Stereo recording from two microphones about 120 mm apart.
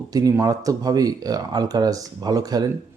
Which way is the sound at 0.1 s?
30° right (ahead or behind).